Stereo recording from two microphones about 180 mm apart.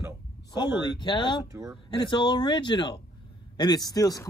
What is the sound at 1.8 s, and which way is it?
Speech, 25° left (ahead or behind).